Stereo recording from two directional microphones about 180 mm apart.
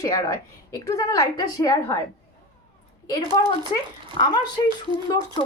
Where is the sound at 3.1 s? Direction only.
20° left (ahead or behind).